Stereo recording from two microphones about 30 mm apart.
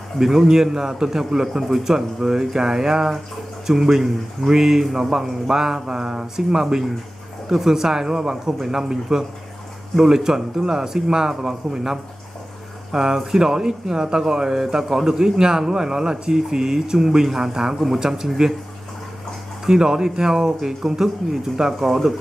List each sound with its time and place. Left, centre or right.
0.2 s speech: centre
0.5 s a man's voice: centre
19.6 s speech: right